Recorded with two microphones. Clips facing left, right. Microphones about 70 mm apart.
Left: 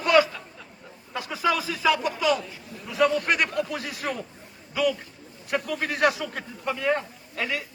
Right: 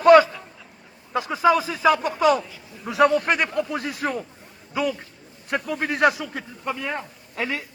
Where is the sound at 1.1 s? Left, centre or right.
Right.